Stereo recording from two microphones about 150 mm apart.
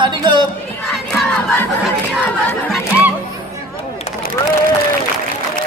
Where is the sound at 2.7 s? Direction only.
5° right (ahead or behind).